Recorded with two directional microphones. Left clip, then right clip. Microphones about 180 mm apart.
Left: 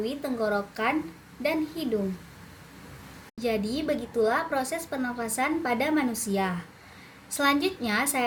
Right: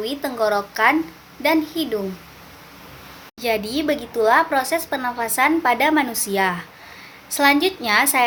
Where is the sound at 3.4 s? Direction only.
10° left (ahead or behind).